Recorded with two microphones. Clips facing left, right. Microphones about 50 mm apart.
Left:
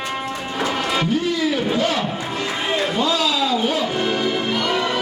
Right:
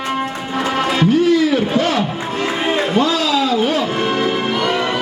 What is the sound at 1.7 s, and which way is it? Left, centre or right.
Music, right.